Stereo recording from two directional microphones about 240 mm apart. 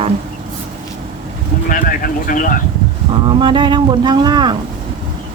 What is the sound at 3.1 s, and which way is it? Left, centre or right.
Speech, right.